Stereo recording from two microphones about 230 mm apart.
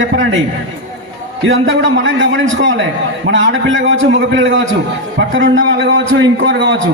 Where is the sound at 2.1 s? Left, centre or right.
Right.